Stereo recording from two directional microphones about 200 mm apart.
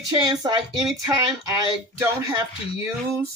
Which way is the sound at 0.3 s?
20° right (ahead or behind).